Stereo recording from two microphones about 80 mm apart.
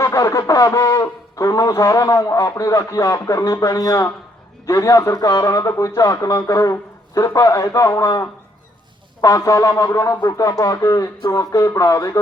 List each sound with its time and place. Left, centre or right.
0.0 s a man's voice: left